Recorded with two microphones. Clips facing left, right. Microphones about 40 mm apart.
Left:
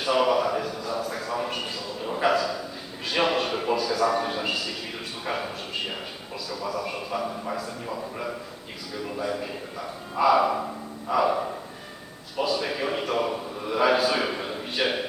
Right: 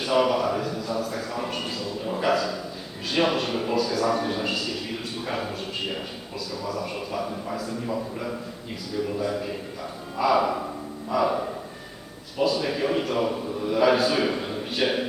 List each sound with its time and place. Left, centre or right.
0.0 s a sound: centre
3.1 s a man's voice: centre
6.5 s a man's voice: centre
12.4 s a man's voice: centre